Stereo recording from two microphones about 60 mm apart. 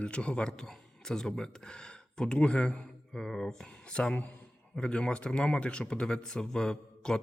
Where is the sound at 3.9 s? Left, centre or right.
Centre.